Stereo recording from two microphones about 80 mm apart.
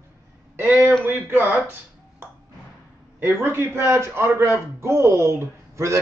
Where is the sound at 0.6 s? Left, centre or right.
Right.